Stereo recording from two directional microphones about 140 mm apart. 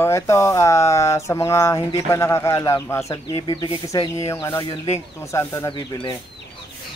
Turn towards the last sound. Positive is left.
turn(degrees=35)  # may be behind; listen again after turning